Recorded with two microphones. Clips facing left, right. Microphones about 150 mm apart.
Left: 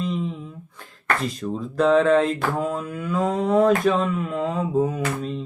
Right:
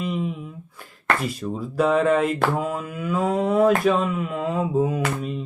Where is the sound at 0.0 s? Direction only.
10° right (ahead or behind).